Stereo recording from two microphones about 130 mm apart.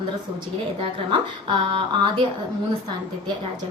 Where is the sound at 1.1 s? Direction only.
40° right (ahead or behind).